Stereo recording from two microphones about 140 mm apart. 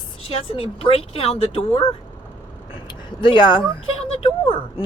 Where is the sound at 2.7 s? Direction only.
35° left (ahead or behind).